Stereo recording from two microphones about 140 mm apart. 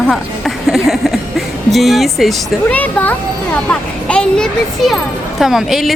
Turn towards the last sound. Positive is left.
turn(degrees=0)  # may be behind; listen again after turning